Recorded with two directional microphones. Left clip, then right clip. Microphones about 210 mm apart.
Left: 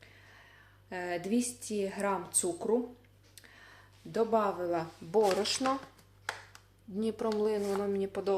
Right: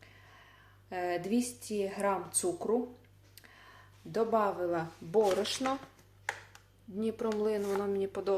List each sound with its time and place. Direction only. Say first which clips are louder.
0.9 s speech: right 1 dB; centre (ahead or behind)
3.3 s a sound: left 1 dB; centre (ahead or behind)
4.1 s speech: even; centre (ahead or behind)
7.0 s speech: left 1 dB; 5° left (ahead or behind)